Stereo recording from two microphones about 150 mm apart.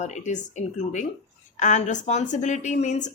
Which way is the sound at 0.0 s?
50° left (ahead or behind).